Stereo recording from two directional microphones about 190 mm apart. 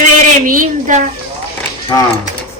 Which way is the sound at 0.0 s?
45° right (ahead or behind).